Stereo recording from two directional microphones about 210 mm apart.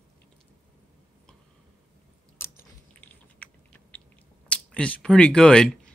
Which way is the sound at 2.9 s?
5° left (ahead or behind).